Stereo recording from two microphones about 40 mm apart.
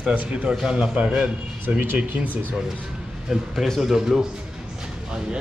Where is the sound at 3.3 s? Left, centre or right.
Centre.